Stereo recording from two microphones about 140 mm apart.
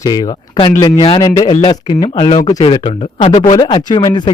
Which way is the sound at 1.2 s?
25° left (ahead or behind).